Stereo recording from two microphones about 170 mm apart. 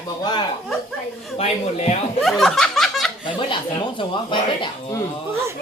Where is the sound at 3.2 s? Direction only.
30° left (ahead or behind).